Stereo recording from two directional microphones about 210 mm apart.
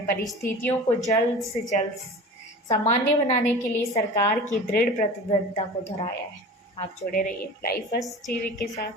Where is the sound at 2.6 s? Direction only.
30° left (ahead or behind).